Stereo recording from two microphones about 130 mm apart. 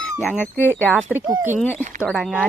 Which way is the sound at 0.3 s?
15° left (ahead or behind).